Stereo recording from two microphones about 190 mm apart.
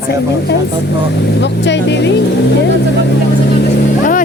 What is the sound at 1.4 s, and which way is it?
Speech, 65° left (ahead or behind).